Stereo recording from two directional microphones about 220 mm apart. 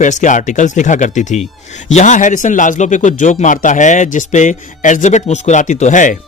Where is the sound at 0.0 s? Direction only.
35° left (ahead or behind).